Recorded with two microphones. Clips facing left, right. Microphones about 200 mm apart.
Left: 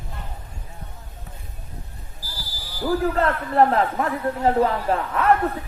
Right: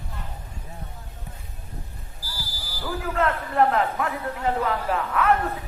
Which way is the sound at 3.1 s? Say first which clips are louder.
Right 2 dB; 35° left (ahead or behind).